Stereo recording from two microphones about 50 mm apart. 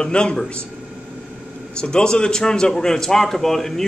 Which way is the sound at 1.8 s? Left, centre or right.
Centre.